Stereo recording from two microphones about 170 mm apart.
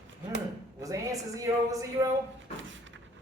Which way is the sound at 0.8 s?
20° right (ahead or behind).